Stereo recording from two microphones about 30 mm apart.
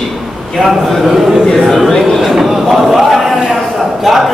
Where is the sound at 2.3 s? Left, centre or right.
Centre.